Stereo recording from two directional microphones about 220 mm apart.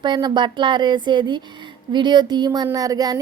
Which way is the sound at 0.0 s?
20° right (ahead or behind).